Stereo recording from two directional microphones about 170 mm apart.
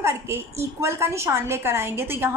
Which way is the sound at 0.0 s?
15° right (ahead or behind).